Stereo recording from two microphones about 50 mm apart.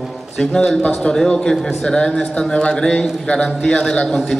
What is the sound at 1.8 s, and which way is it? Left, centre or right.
A man's voice, centre.